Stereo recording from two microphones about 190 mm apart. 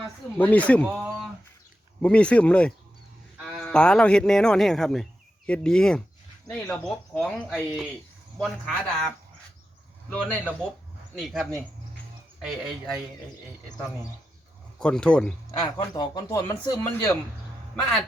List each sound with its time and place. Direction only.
0.3 s speech: 10° left (ahead or behind)
0.9 s speech: 10° right (ahead or behind)
2.0 s speech: 5° left (ahead or behind)
14.8 s speech: 5° left (ahead or behind)
15.5 s speech: 20° left (ahead or behind)